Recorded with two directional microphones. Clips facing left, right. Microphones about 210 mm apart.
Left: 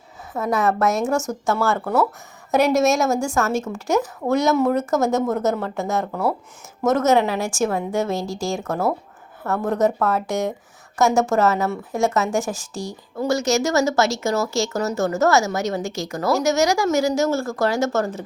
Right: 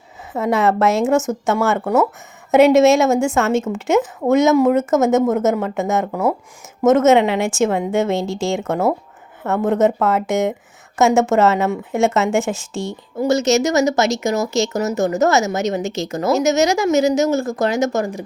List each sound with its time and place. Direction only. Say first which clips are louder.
0.3 s speech: right 4 dB; 25° right (ahead or behind)